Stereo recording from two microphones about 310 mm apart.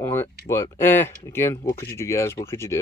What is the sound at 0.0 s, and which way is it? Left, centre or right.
Speech, centre.